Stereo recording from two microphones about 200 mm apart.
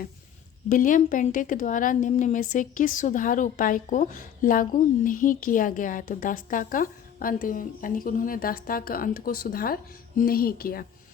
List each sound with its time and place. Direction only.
0.7 s a woman's voice: 40° left (ahead or behind)